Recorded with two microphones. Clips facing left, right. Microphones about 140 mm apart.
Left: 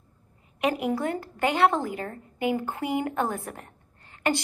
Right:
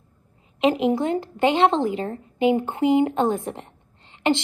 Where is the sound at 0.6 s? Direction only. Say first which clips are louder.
Right 6 dB; 20° right (ahead or behind).